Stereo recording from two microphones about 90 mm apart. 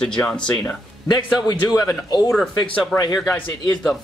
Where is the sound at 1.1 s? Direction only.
50° left (ahead or behind).